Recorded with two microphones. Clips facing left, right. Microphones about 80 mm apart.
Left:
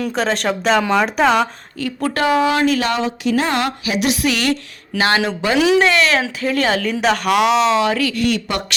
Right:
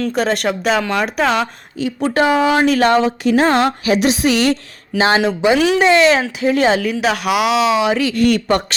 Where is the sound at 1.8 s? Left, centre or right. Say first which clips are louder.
Right 3 dB; right.